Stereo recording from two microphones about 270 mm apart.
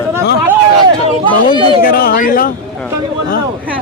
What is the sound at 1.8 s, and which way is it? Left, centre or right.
Speech, left.